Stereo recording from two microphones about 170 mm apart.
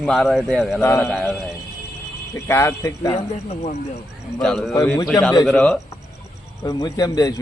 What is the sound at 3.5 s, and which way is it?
Speech, 40° left (ahead or behind).